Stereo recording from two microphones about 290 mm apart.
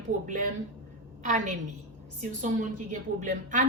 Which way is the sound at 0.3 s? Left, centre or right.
Right.